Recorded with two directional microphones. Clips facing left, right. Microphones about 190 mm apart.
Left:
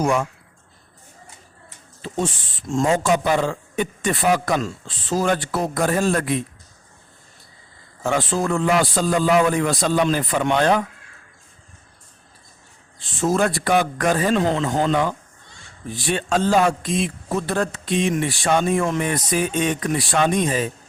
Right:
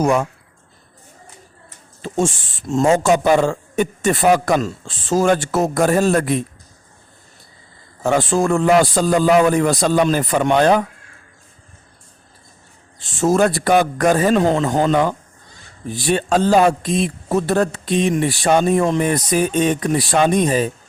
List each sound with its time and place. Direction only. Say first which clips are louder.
0.0 s speech: right 4 dB; 40° right (ahead or behind)
2.2 s speech: right 5 dB; 40° right (ahead or behind)
8.0 s speech: right 5 dB; 45° right (ahead or behind)
13.0 s speech: right 4 dB; 45° right (ahead or behind)